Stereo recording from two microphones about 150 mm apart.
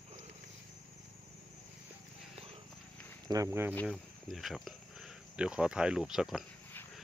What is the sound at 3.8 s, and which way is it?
Speech, centre (ahead or behind).